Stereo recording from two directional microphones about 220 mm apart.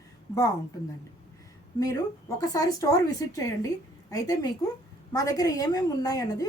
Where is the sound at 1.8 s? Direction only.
15° left (ahead or behind).